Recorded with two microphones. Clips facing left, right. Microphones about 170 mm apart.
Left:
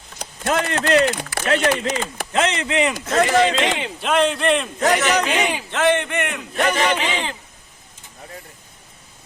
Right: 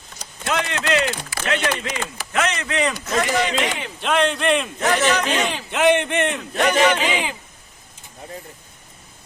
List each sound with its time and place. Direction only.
0.2 s speech: 45° left (ahead or behind)
2.3 s speech: 25° left (ahead or behind)
4.0 s speech: centre (ahead or behind)
4.8 s speech: 40° left (ahead or behind)
5.3 s speech: 10° left (ahead or behind)
5.7 s speech: 15° right (ahead or behind)
6.6 s speech: 5° left (ahead or behind)
7.0 s speech: 10° right (ahead or behind)